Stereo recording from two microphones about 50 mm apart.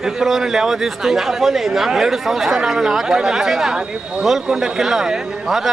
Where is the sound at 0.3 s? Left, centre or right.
Centre.